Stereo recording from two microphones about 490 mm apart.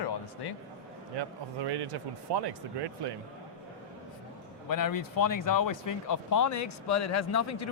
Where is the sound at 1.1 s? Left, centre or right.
Right.